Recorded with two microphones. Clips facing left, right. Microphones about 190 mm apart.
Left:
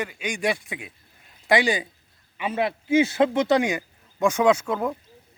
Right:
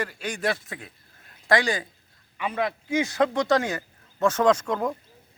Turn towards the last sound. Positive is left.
turn(degrees=5)  # may be behind; listen again after turning